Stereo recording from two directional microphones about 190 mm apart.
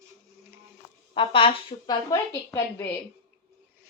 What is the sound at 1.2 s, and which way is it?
Speech, 30° left (ahead or behind).